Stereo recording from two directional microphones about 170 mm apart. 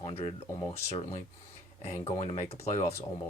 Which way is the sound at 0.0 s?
35° left (ahead or behind).